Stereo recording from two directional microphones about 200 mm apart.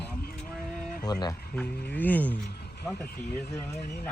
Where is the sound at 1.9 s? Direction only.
10° left (ahead or behind).